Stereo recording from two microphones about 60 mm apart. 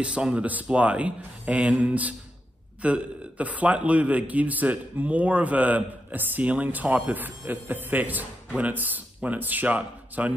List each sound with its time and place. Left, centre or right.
0.0 s speech: centre